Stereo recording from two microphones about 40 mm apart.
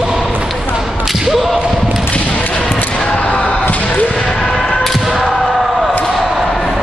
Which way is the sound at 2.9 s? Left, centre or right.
Left.